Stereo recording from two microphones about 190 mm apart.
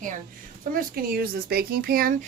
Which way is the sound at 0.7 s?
50° right (ahead or behind).